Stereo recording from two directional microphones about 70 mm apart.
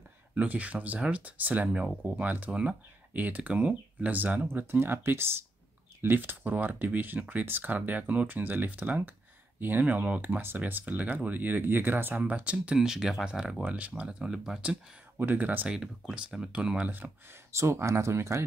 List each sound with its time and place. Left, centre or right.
0.3 s speech: right
13.7 s speech: right
15.1 s speech: right
16.1 s speech: centre
17.5 s speech: right